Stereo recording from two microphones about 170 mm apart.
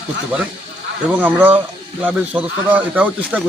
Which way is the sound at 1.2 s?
10° right (ahead or behind).